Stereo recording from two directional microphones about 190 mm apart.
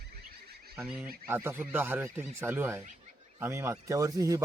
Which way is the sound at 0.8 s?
10° right (ahead or behind).